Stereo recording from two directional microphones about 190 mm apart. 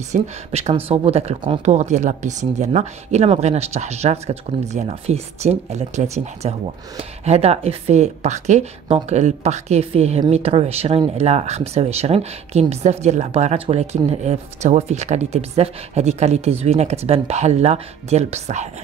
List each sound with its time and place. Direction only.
0.1 s a woman's voice: 35° right (ahead or behind)